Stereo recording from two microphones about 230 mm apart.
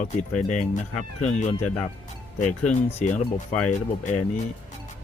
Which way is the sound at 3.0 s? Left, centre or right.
Left.